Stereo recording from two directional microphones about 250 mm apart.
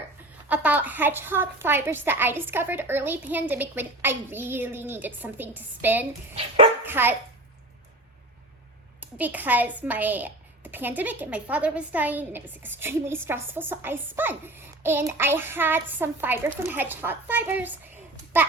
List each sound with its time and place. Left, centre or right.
0.4 s a child's voice: centre
9.0 s speech: centre